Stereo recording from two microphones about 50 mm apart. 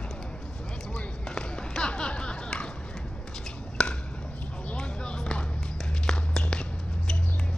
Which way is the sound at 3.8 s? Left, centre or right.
Centre.